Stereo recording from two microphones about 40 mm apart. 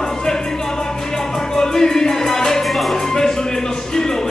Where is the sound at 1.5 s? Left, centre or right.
Centre.